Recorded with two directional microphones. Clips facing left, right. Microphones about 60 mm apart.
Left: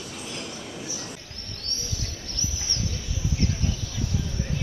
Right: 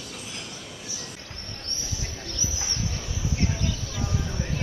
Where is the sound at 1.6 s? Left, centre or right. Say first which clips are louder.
Left 1 dB; right.